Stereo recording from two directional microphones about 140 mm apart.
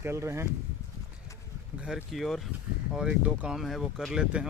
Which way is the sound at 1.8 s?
5° right (ahead or behind).